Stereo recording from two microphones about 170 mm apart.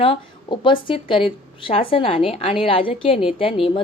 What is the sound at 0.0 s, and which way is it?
A woman's voice, 30° left (ahead or behind).